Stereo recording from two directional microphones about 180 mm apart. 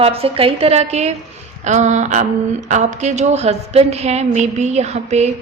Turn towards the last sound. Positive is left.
turn(degrees=-40)  # may be behind; listen again after turning